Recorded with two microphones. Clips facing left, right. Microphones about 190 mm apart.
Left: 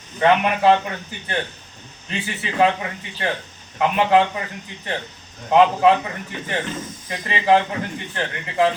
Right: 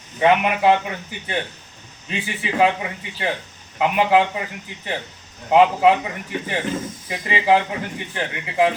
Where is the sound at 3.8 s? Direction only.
15° right (ahead or behind).